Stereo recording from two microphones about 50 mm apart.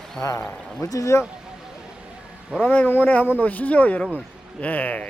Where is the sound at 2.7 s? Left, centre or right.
Left.